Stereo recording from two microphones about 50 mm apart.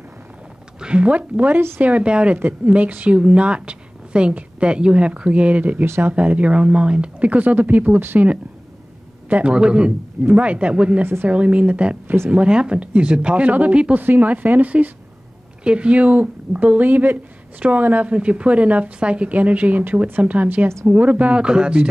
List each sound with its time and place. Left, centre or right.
0.7 s a woman's voice: right
9.4 s a woman's voice: right
11.0 s a woman's voice: right
11.2 s a woman's voice: right
13.9 s speech: right
15.6 s a woman's voice: right
20.6 s a woman's voice: right
20.9 s a woman's voice: right